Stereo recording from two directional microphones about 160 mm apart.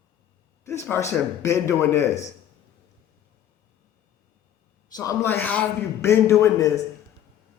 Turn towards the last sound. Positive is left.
turn(degrees=20)  # may be behind; listen again after turning